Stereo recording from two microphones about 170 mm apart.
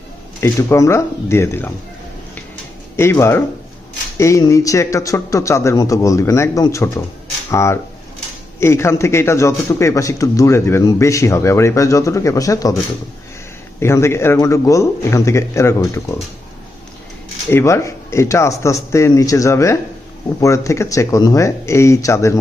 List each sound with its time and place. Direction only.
0.3 s speech: 15° left (ahead or behind)
2.9 s speech: 15° left (ahead or behind)
13.7 s speech: 15° left (ahead or behind)
17.5 s speech: 15° left (ahead or behind)